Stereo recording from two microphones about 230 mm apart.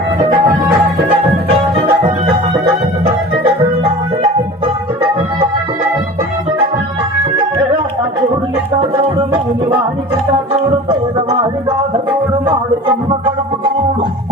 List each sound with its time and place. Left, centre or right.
0.2 s music: centre
9.3 s music: right
13.1 s organ: centre